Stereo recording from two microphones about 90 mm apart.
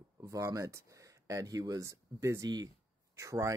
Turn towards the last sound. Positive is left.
turn(degrees=-35)  # may be behind; listen again after turning